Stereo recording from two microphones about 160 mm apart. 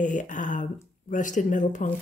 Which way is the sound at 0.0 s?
50° left (ahead or behind).